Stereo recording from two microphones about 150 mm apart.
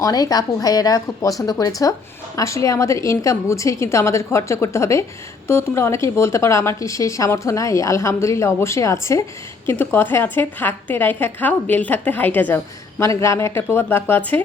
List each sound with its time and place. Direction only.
0.0 s a woman's voice: 25° left (ahead or behind)